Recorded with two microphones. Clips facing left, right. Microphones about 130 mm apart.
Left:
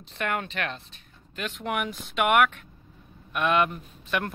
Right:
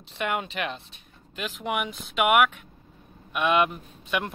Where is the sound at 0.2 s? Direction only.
5° right (ahead or behind).